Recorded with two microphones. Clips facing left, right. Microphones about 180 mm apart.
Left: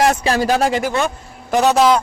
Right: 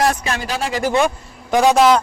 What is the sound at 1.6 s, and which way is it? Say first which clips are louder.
Speech: right 1 dB; 10° right (ahead or behind).